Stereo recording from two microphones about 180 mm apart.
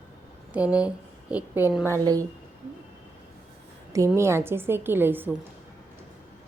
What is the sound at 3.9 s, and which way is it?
A woman's voice, 15° right (ahead or behind).